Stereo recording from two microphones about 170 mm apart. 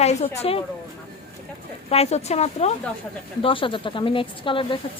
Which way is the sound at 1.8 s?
35° left (ahead or behind).